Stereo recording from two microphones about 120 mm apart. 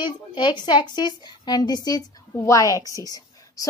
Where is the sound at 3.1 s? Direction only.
30° left (ahead or behind).